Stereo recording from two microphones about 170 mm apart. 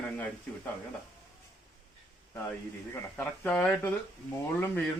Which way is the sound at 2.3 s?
10° left (ahead or behind).